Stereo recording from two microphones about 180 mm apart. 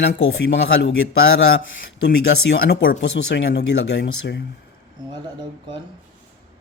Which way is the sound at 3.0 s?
75° left (ahead or behind).